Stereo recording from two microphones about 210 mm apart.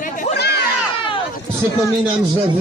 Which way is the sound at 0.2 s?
50° left (ahead or behind).